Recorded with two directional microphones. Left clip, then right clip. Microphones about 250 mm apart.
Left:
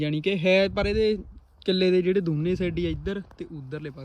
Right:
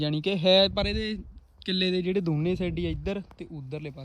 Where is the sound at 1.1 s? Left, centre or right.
Centre.